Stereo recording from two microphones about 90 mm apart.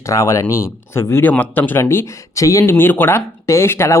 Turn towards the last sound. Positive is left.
turn(degrees=30)  # may be behind; listen again after turning